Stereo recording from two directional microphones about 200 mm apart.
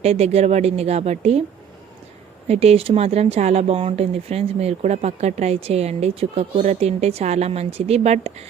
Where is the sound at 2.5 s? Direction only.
30° right (ahead or behind).